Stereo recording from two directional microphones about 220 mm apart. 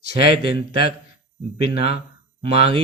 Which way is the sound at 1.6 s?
25° right (ahead or behind).